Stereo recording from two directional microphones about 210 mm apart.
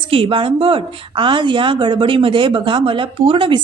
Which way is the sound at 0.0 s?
25° right (ahead or behind).